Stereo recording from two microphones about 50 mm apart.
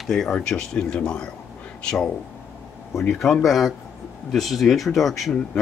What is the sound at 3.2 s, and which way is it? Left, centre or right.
Speech, centre.